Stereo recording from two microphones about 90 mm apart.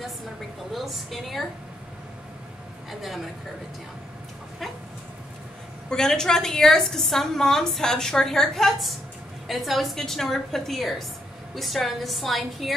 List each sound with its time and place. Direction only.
0.7 s a woman's voice: centre (ahead or behind)
2.9 s a woman's voice: centre (ahead or behind)
5.9 s a woman's voice: 5° left (ahead or behind)